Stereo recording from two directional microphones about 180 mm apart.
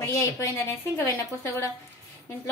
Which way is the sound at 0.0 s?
15° left (ahead or behind).